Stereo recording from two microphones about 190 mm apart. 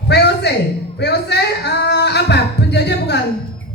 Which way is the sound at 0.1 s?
60° left (ahead or behind).